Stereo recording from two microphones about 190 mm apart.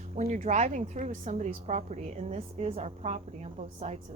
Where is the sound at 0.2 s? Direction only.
40° right (ahead or behind).